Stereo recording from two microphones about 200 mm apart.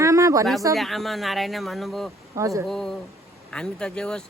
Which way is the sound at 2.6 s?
Centre (ahead or behind).